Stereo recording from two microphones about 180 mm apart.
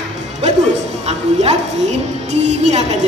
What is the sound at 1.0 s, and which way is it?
A woman's voice, 35° right (ahead or behind).